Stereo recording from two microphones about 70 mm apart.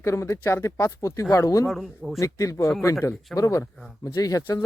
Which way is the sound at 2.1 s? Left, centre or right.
Left.